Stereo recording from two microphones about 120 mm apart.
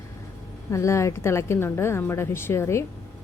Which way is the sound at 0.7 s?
25° left (ahead or behind).